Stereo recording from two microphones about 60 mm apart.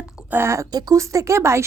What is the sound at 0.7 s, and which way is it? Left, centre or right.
Speech, right.